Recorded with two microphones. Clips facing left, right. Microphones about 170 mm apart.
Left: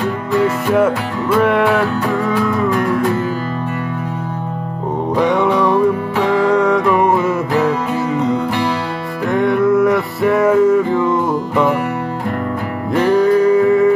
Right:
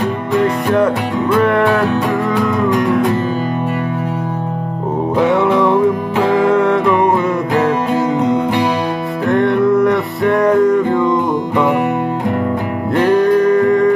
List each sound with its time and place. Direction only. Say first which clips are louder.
0.7 s music: even; 5° left (ahead or behind)
5.1 s music: right 1 dB; 5° right (ahead or behind)
9.3 s music: right 1 dB; centre (ahead or behind)
12.9 s music: right 1 dB; 5° left (ahead or behind)